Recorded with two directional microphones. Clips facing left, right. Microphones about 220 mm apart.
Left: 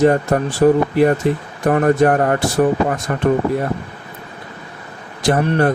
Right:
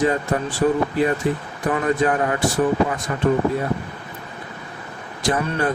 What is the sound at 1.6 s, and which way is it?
Speech, 50° left (ahead or behind).